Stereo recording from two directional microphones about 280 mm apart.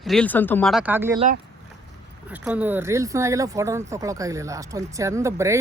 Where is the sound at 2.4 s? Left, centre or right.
Centre.